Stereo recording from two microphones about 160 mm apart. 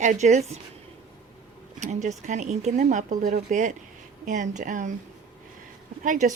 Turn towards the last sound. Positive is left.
turn(degrees=-55)  # may be behind; listen again after turning